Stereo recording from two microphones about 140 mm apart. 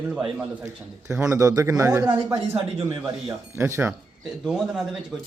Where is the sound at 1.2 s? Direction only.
20° right (ahead or behind).